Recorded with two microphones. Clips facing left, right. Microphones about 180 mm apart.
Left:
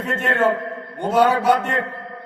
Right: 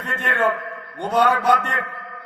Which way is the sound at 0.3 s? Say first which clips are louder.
Left 2 dB; 25° left (ahead or behind).